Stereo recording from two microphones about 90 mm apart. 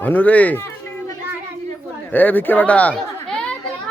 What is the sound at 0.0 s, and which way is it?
Speech, 20° left (ahead or behind).